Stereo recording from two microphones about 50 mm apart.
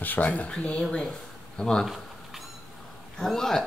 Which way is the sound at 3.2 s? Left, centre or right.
Centre.